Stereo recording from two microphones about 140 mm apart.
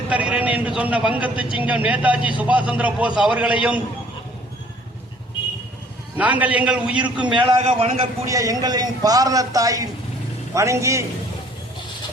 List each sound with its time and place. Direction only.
0.1 s a man's voice: 10° right (ahead or behind)
6.1 s a man's voice: 10° right (ahead or behind)
7.3 s a man's voice: 35° right (ahead or behind)
8.3 s a man's voice: 25° right (ahead or behind)